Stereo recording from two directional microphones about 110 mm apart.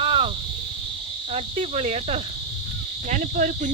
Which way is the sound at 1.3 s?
65° right (ahead or behind).